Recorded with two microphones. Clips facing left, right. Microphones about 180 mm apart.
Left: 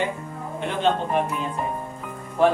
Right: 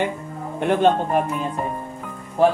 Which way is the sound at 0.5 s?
50° right (ahead or behind).